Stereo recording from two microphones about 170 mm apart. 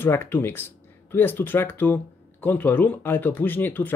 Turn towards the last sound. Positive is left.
turn(degrees=10)  # may be behind; listen again after turning